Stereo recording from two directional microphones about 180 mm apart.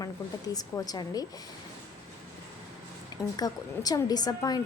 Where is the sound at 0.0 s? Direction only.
20° left (ahead or behind).